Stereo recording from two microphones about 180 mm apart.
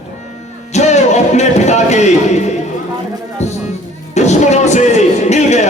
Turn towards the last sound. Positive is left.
turn(degrees=40)  # may be behind; listen again after turning